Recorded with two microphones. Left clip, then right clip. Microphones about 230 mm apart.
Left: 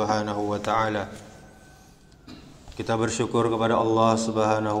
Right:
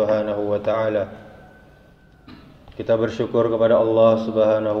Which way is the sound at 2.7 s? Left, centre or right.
Left.